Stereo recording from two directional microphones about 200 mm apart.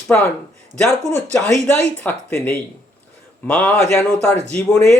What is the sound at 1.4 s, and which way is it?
Speech, 5° left (ahead or behind).